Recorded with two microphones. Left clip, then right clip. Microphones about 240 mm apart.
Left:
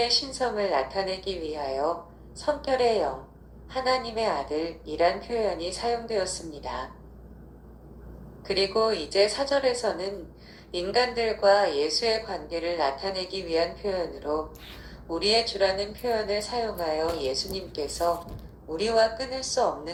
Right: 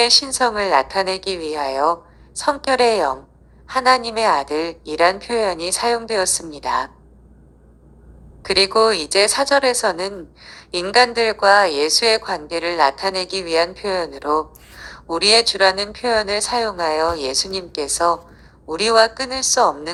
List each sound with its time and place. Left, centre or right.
0.0 s a woman's voice: right
8.5 s a woman's voice: right
10.9 s a woman's voice: right